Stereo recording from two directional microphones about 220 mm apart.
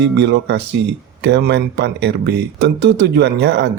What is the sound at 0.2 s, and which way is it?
Speech, 50° right (ahead or behind).